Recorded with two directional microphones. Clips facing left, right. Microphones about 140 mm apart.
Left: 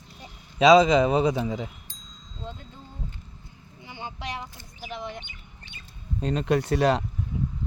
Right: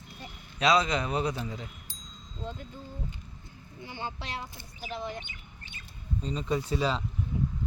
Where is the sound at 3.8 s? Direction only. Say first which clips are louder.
Left 2 dB; 15° left (ahead or behind).